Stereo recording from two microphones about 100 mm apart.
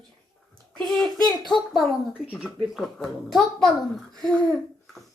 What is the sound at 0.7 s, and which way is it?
Speech, 5° left (ahead or behind).